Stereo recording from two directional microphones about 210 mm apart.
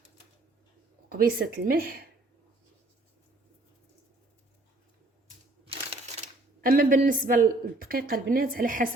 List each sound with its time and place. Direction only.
1.1 s a woman's voice: 40° right (ahead or behind)
6.6 s a woman's voice: 45° right (ahead or behind)